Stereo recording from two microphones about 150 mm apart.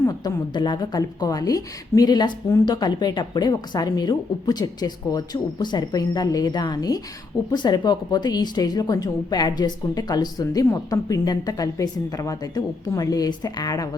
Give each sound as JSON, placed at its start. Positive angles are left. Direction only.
{"t": 0.0, "sound": "a woman's voice", "side_deg": 25}